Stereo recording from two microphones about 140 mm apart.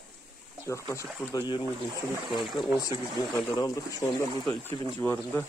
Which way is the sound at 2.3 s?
Centre (ahead or behind).